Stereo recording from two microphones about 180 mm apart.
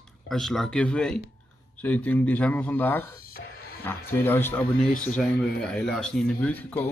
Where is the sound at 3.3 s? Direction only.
55° left (ahead or behind).